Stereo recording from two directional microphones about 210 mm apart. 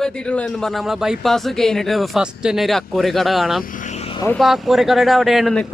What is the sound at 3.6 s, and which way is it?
Vehicle, 40° left (ahead or behind).